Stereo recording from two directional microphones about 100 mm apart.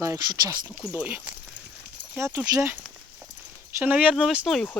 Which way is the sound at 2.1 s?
30° right (ahead or behind).